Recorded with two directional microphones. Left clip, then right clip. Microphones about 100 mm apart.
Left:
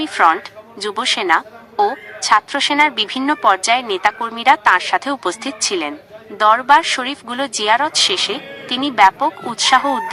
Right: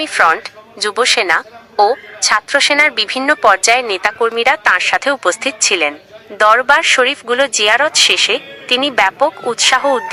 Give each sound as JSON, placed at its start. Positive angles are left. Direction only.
{"t": 0.0, "sound": "a woman's voice", "side_deg": 30}